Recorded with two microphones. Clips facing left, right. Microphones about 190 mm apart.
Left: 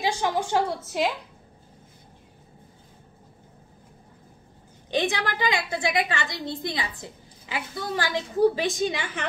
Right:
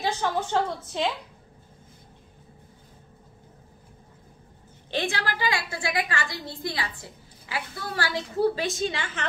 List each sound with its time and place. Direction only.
0.0 s a woman's voice: 10° left (ahead or behind)
4.9 s a woman's voice: 20° left (ahead or behind)